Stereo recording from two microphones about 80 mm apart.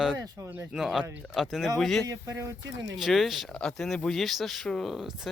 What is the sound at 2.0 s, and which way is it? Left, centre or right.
Speech, right.